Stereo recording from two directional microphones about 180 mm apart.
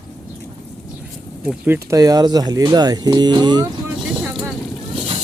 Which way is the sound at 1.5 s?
10° right (ahead or behind).